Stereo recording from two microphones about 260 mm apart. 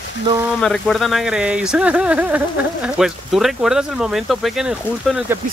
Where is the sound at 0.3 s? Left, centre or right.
Centre.